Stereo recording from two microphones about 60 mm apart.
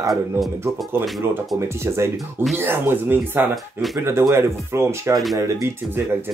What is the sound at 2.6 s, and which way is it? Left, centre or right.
Speech, right.